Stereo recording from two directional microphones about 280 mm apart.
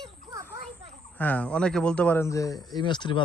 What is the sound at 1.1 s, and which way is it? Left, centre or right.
Speech, centre.